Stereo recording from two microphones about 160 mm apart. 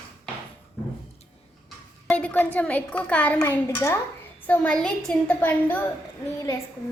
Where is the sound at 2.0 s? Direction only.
5° left (ahead or behind).